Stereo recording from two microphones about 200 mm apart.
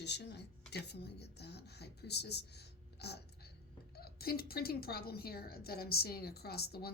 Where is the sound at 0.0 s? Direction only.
60° left (ahead or behind).